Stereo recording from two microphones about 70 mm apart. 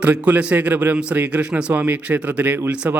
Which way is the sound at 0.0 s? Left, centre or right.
Right.